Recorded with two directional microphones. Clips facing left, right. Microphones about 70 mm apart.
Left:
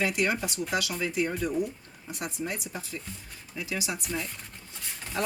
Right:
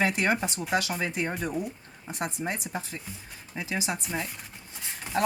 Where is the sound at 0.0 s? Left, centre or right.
Right.